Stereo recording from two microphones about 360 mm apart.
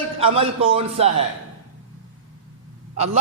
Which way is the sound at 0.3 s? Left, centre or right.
Centre.